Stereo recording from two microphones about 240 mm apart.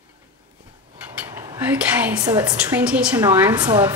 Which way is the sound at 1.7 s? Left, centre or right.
Centre.